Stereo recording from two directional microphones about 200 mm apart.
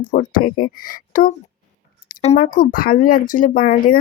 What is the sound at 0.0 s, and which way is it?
Speech, 40° left (ahead or behind).